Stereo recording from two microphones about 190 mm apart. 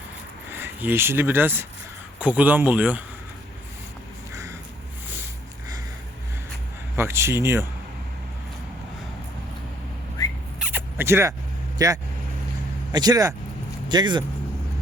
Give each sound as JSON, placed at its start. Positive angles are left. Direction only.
{"t": 0.5, "sound": "speech", "side_deg": -10}
{"t": 6.9, "sound": "speech", "side_deg": -15}
{"t": 10.6, "sound": "zipper", "side_deg": -10}
{"t": 11.8, "sound": "speech", "side_deg": -20}